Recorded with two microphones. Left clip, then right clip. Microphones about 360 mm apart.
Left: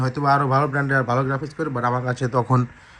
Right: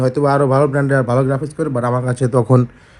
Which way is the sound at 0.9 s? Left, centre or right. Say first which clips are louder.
Right 5 dB; centre.